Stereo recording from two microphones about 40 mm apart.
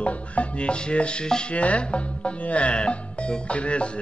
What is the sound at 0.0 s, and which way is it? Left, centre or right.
Music, left.